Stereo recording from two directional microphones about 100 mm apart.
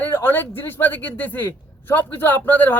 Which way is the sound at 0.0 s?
20° left (ahead or behind).